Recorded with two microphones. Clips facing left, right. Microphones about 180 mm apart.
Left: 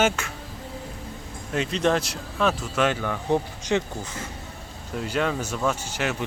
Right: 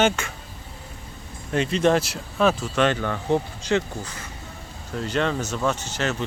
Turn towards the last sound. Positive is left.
turn(degrees=10)  # may be behind; listen again after turning